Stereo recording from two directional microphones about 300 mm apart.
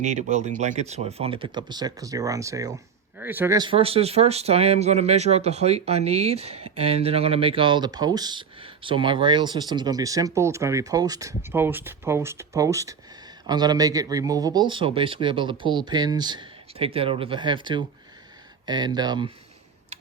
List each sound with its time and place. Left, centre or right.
0.0 s speech: right